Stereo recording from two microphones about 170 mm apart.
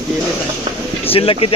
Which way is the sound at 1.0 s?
35° left (ahead or behind).